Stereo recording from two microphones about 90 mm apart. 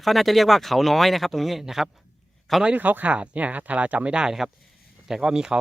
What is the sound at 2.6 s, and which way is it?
Speech, 20° right (ahead or behind).